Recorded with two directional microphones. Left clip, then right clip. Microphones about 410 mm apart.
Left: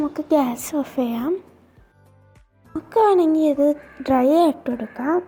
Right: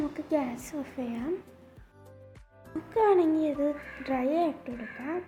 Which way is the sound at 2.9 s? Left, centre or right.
Centre.